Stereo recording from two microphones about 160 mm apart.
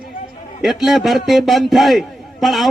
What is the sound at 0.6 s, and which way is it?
Speech, centre (ahead or behind).